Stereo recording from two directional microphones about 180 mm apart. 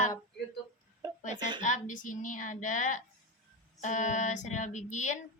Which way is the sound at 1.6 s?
45° left (ahead or behind).